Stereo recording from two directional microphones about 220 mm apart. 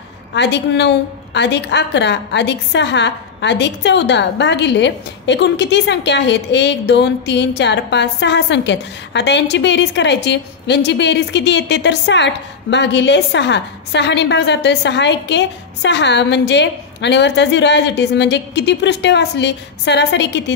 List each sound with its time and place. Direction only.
0.3 s a woman's voice: 50° left (ahead or behind)